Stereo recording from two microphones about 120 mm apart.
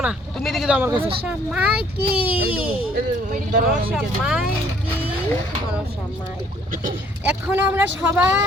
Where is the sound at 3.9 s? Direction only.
5° right (ahead or behind).